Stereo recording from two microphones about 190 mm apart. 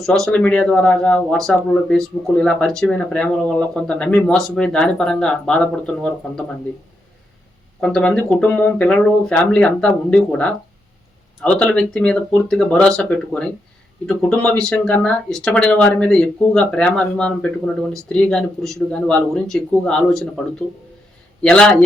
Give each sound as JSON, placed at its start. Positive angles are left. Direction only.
{"t": 0.0, "sound": "speech", "side_deg": 5}
{"t": 7.8, "sound": "speech", "side_deg": 5}
{"t": 21.4, "sound": "speech", "side_deg": 5}